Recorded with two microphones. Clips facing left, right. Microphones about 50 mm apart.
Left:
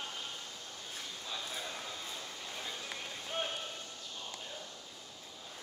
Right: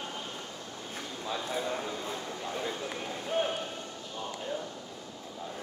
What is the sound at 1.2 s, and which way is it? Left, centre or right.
Speech, right.